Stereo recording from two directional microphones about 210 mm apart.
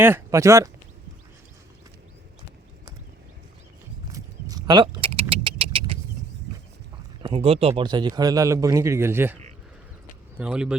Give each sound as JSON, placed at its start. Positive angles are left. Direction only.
{"t": 0.0, "sound": "a man's voice", "side_deg": -10}
{"t": 4.1, "sound": "vehicle", "side_deg": -20}
{"t": 5.3, "sound": "a sound", "side_deg": -25}
{"t": 7.2, "sound": "a man's voice", "side_deg": -25}